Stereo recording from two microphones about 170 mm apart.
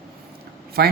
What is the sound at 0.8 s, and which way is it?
Speech, 70° right (ahead or behind).